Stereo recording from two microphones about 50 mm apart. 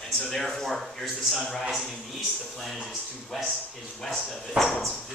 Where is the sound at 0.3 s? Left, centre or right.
Centre.